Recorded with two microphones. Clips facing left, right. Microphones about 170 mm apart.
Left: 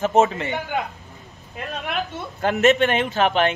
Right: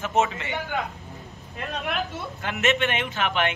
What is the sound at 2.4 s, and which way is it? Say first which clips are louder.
A man's voice: left 8 dB; 40° left (ahead or behind).